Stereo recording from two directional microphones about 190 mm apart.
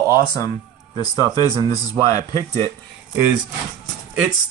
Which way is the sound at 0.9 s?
20° left (ahead or behind).